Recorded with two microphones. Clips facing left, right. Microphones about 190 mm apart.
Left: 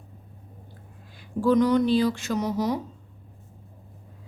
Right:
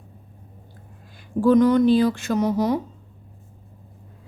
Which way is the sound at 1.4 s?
50° right (ahead or behind).